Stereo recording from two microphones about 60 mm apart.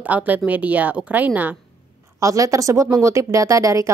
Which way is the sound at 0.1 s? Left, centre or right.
Right.